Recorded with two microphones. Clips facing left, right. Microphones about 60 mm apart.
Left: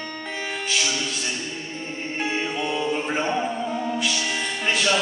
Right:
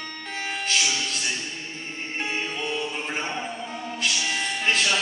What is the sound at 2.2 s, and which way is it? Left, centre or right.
Music, centre.